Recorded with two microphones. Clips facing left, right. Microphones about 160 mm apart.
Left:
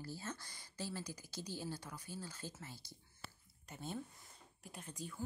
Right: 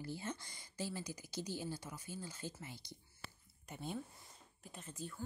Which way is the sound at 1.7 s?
10° right (ahead or behind).